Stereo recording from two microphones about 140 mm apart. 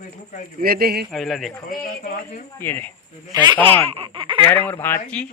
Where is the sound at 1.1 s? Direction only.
Centre (ahead or behind).